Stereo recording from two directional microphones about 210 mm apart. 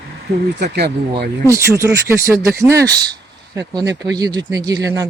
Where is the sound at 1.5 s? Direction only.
15° right (ahead or behind).